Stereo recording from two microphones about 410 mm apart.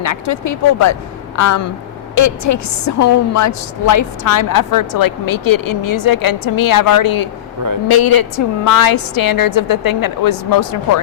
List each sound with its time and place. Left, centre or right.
0.0 s a woman's voice: left